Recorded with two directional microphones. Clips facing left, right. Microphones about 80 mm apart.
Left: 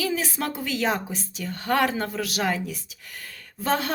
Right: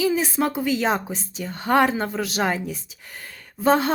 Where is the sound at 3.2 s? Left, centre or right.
Right.